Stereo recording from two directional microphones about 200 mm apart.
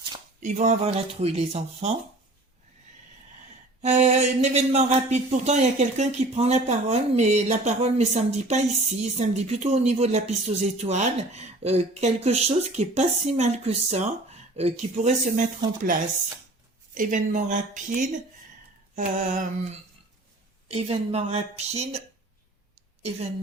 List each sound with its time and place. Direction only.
0.3 s speech: 35° right (ahead or behind)
3.8 s speech: 35° right (ahead or behind)
20.7 s speech: 30° right (ahead or behind)